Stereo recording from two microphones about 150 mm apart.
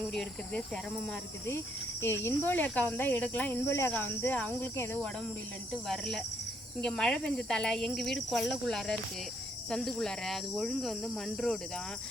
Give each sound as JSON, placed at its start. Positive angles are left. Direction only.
{"t": 0.0, "sound": "speech", "side_deg": 5}
{"t": 1.5, "sound": "speech", "side_deg": 15}
{"t": 5.7, "sound": "speech", "side_deg": 0}